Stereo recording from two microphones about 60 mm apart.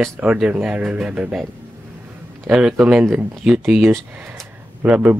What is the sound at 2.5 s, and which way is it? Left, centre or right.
Speech, centre.